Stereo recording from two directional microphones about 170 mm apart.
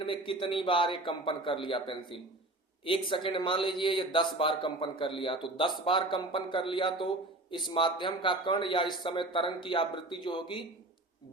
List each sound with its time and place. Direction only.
0.0 s a man's voice: 30° left (ahead or behind)